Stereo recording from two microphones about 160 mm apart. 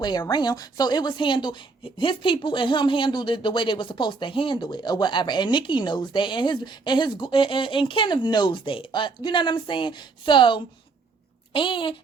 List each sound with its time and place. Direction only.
0.0 s a woman's voice: 25° left (ahead or behind)